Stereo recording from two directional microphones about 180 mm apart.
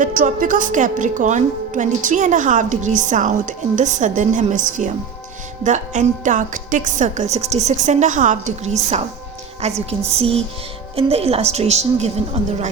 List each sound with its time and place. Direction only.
0.0 s a woman's voice: 50° right (ahead or behind)